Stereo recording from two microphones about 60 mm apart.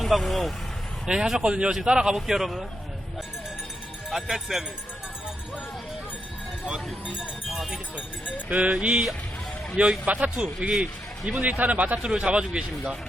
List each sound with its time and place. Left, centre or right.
0.0 s speech: centre
1.0 s a man's voice: centre
4.1 s a man's voice: centre
6.7 s speech: centre
8.4 s a man's voice: right